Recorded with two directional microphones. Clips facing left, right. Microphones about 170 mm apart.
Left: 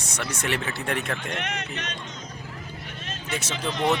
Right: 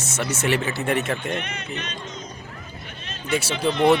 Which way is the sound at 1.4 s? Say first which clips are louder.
Even; 80° left.